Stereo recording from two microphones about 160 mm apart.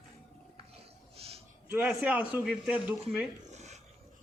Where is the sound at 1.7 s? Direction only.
5° right (ahead or behind).